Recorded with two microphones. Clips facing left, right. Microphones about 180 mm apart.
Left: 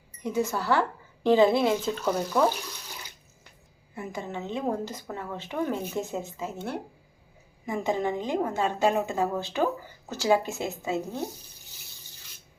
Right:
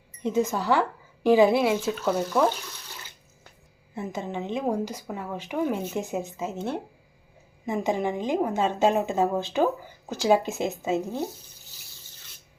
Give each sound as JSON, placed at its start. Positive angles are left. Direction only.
{"t": 0.2, "sound": "a woman's voice", "side_deg": -20}
{"t": 3.9, "sound": "a woman's voice", "side_deg": -20}
{"t": 7.6, "sound": "a woman's voice", "side_deg": -20}